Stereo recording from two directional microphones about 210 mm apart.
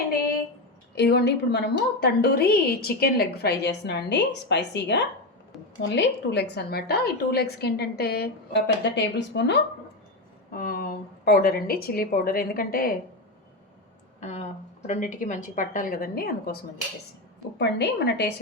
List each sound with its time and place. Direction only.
0.9 s a woman's voice: 50° left (ahead or behind)
10.5 s a woman's voice: 45° left (ahead or behind)
14.2 s a woman's voice: 35° left (ahead or behind)
17.6 s a woman's voice: 50° left (ahead or behind)